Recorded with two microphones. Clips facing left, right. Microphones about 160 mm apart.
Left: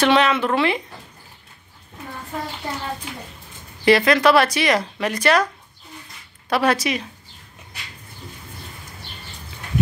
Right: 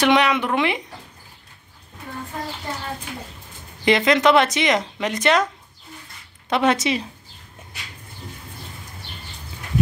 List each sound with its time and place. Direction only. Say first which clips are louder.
0.0 s speech: left 1 dB; 15° right (ahead or behind)
3.8 s speech: left 1 dB; 20° right (ahead or behind)
6.5 s speech: even; 20° right (ahead or behind)